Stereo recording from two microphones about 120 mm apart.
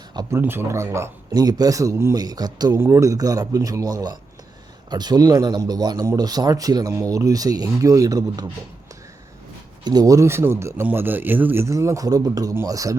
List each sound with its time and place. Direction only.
0.3 s a man's voice: 20° right (ahead or behind)
9.8 s a man's voice: 35° right (ahead or behind)